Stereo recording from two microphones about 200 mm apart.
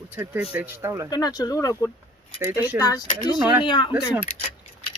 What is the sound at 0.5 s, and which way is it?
Speech, 10° right (ahead or behind).